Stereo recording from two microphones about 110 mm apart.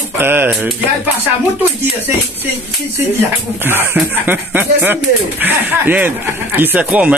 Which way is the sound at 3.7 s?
15° right (ahead or behind).